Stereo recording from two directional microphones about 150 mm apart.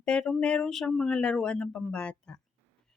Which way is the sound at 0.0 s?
5° left (ahead or behind).